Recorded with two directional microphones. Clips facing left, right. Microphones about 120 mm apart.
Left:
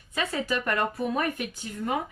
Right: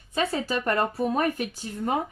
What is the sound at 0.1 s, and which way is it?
Speech, 30° right (ahead or behind).